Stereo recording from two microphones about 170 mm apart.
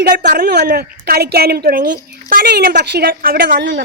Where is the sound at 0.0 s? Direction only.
55° right (ahead or behind).